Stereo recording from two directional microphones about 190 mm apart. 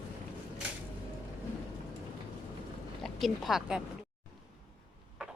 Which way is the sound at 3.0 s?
Centre (ahead or behind).